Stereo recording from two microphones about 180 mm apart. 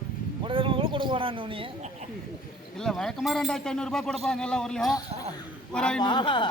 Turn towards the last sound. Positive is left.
turn(degrees=25)  # may be behind; listen again after turning